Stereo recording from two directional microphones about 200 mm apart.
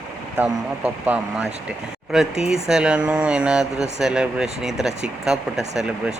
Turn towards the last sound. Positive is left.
turn(degrees=-5)  # may be behind; listen again after turning